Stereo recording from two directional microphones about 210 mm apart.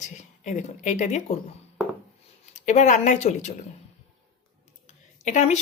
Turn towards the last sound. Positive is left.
turn(degrees=35)  # may be behind; listen again after turning